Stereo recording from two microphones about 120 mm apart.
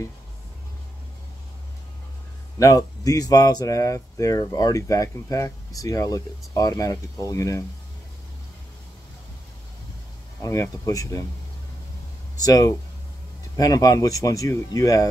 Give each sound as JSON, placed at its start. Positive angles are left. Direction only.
{"t": 2.6, "sound": "speech", "side_deg": 30}
{"t": 10.4, "sound": "speech", "side_deg": 30}
{"t": 12.4, "sound": "speech", "side_deg": 30}